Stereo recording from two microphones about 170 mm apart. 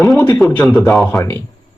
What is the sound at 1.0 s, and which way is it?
Speech, 15° left (ahead or behind).